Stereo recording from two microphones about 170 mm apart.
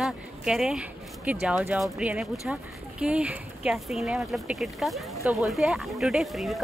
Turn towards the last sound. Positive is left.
turn(degrees=0)  # may be behind; listen again after turning